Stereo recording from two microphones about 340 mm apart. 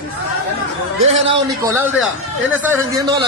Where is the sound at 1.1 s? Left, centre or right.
Right.